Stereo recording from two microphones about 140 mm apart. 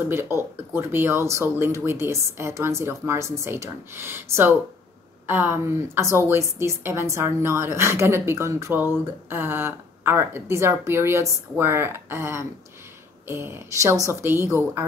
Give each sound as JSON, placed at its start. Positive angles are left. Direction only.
{"t": 0.1, "sound": "a woman's voice", "side_deg": -15}